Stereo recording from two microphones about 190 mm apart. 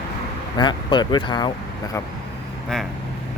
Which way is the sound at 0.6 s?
25° left (ahead or behind).